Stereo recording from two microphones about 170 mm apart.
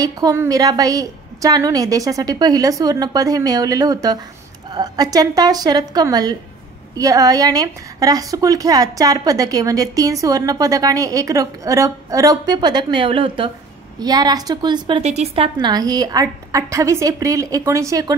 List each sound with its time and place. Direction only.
0.0 s a woman's voice: 20° right (ahead or behind)